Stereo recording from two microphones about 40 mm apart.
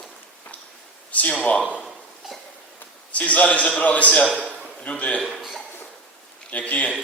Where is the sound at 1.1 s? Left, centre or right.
Left.